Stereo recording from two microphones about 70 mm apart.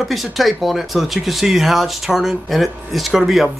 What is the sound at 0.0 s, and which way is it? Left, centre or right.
Speech, centre.